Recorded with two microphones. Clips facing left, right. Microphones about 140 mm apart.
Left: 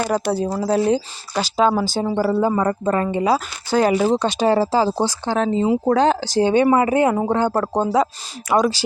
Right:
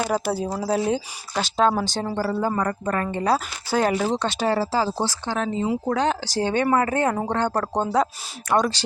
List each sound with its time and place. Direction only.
0.0 s speech: 5° right (ahead or behind); by 2.6 s 15° left (ahead or behind)
2.6 s speech: 25° left (ahead or behind)
3.2 s speech: centre (ahead or behind); by 4.9 s 20° left (ahead or behind)
5.2 s speech: 30° left (ahead or behind); by 8.8 s 5° left (ahead or behind)